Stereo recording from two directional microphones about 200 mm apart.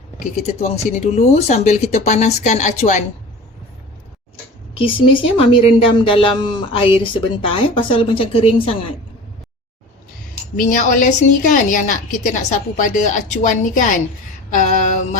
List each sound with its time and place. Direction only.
0.6 s a woman's voice: 35° left (ahead or behind)
5.4 s speech: 25° left (ahead or behind)
10.6 s a woman's voice: 40° left (ahead or behind)
14.5 s mantra: 40° left (ahead or behind)